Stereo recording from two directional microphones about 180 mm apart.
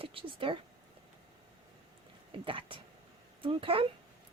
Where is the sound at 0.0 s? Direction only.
30° right (ahead or behind).